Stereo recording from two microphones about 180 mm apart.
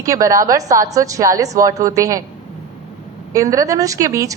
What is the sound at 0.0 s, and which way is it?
A woman's voice, 20° right (ahead or behind).